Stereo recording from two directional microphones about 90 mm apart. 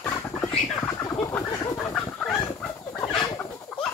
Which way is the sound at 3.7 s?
5° left (ahead or behind).